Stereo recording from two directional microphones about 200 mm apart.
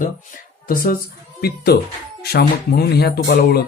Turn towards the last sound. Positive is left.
turn(degrees=50)  # may be behind; listen again after turning